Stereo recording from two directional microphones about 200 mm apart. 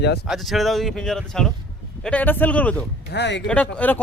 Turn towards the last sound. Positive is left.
turn(degrees=5)  # may be behind; listen again after turning